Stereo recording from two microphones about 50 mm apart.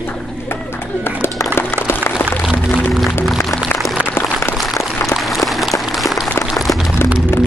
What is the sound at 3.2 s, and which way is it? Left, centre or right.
Music, centre.